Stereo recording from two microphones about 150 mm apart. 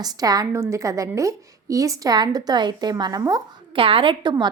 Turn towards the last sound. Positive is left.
turn(degrees=-30)  # may be behind; listen again after turning